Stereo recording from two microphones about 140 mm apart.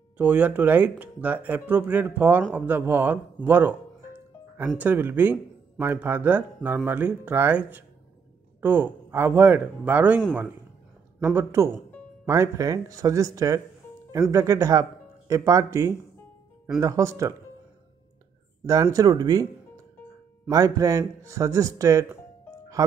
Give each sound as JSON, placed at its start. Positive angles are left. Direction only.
{"t": 0.2, "sound": "speech", "side_deg": -10}
{"t": 11.3, "sound": "speech", "side_deg": -20}
{"t": 18.7, "sound": "speech", "side_deg": -25}
{"t": 20.4, "sound": "speech", "side_deg": -25}